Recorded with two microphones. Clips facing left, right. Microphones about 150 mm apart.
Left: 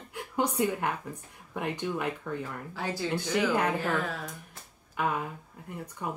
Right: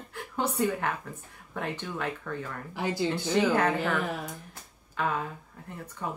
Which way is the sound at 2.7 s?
15° right (ahead or behind).